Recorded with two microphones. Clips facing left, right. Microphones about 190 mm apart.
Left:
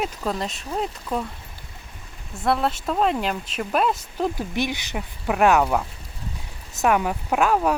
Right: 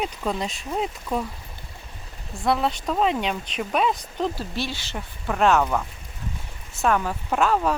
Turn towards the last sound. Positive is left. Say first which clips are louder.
# left 1 dB
turn(degrees=10)  # may be behind; listen again after turning